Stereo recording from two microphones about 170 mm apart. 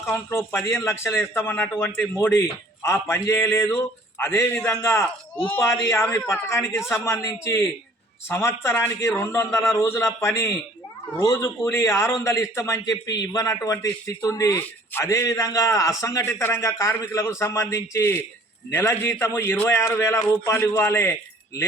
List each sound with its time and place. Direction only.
0.0 s a man's voice: 15° left (ahead or behind)